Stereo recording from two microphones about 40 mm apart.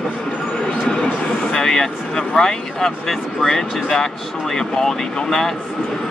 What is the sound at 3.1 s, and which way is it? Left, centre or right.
Speech, centre.